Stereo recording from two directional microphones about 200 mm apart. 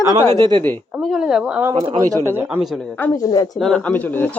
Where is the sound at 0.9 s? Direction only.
Centre (ahead or behind); by 3.5 s 20° left (ahead or behind).